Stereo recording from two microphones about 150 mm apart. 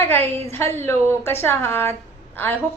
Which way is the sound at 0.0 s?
15° left (ahead or behind).